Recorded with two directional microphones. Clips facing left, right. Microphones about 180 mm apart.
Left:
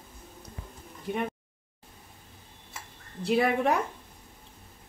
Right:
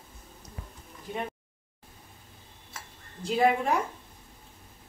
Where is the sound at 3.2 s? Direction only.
65° left (ahead or behind).